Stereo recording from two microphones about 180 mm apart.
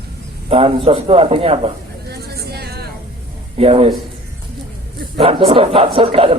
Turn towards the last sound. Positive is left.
turn(degrees=-30)  # may be behind; listen again after turning